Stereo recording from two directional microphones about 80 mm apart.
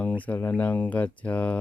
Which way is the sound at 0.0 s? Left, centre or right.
Centre.